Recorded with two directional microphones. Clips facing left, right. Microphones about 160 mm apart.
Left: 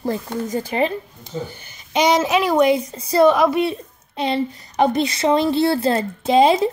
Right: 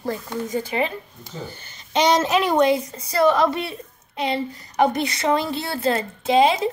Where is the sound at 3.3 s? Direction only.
15° left (ahead or behind).